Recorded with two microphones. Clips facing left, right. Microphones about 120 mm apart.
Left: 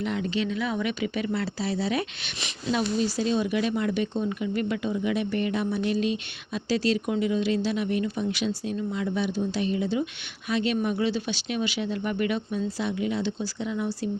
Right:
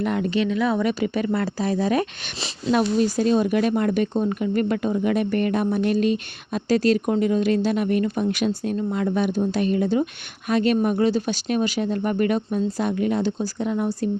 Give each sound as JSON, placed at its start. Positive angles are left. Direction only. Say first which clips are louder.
{"t": 0.0, "sound": "speech", "louder": "right 5 dB", "side_deg": -50}